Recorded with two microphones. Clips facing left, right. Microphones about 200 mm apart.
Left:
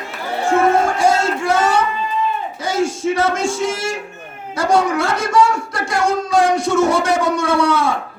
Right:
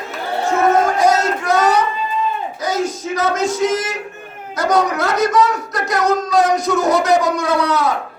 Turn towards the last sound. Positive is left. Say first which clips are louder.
# left 1 dB
turn(degrees=30)  # may be behind; listen again after turning